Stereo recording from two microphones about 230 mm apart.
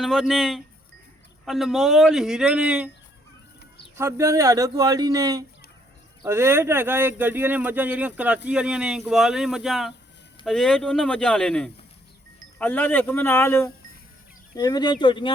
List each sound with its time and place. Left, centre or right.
0.0 s speech: centre
3.9 s speech: centre; by 15.3 s left